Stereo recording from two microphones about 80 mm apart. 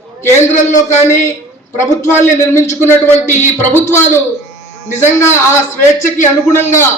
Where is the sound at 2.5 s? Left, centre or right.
Left.